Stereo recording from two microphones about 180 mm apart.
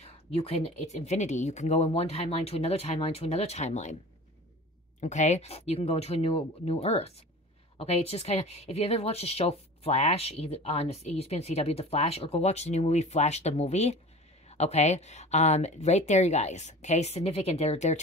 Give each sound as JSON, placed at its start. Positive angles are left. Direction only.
{"t": 0.0, "sound": "speech", "side_deg": 35}
{"t": 5.0, "sound": "speech", "side_deg": 40}